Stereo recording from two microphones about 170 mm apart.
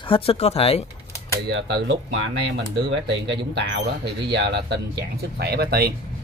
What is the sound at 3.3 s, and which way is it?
Speech, 90° right.